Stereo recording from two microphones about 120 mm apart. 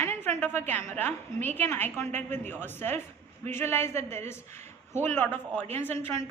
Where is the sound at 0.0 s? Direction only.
20° left (ahead or behind).